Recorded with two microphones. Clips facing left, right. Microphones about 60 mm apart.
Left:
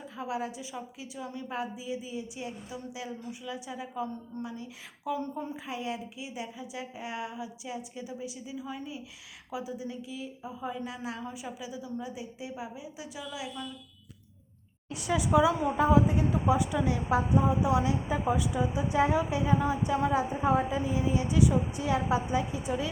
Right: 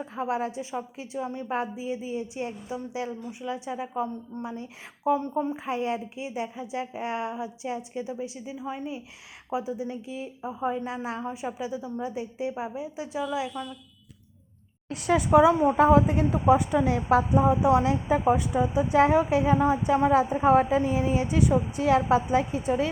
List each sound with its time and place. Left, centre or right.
0.0 s a woman's voice: right
14.8 s a woman's voice: right